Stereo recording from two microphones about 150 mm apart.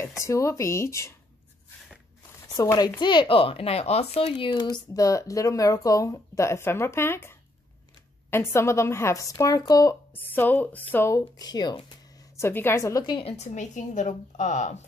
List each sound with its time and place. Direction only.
0.2 s speech: 20° left (ahead or behind)
2.5 s speech: 25° left (ahead or behind)
10.1 s speech: 10° left (ahead or behind); by 11.8 s 30° left (ahead or behind)
12.4 s speech: 15° left (ahead or behind); by 13.5 s 40° left (ahead or behind)
13.6 s speech: 55° left (ahead or behind)